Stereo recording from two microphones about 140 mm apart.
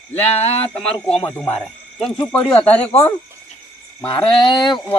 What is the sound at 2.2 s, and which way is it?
Speech, 15° left (ahead or behind).